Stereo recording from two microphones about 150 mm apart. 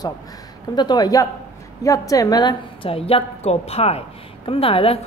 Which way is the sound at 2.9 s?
40° left (ahead or behind).